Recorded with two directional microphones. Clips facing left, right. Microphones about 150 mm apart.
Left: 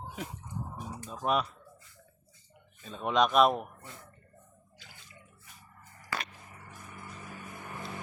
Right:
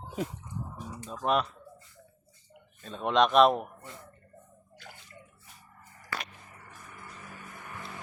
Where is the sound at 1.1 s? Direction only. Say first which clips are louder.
Right 2 dB; 5° left (ahead or behind).